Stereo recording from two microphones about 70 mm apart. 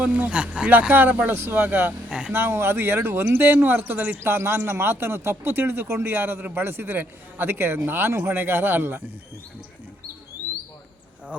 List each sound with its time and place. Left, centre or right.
0.0 s speech: centre
0.7 s speech: right
2.0 s speech: centre
2.3 s speech: right